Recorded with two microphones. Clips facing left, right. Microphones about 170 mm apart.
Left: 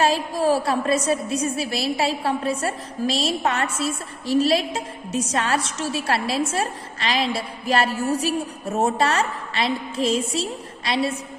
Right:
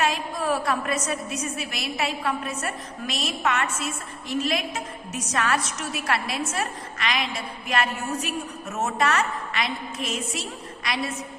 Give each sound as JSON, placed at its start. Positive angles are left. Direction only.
{"t": 0.0, "sound": "a woman's voice", "side_deg": 30}